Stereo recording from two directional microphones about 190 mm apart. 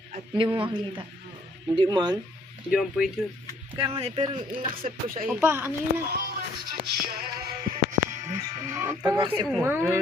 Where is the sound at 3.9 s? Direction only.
30° right (ahead or behind).